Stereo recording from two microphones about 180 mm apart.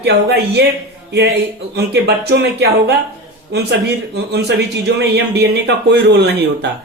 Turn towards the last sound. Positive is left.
turn(degrees=-65)  # may be behind; listen again after turning